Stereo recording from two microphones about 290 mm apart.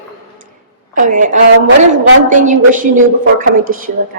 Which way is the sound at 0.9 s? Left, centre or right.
Right.